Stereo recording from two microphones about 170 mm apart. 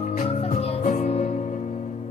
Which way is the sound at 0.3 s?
35° left (ahead or behind).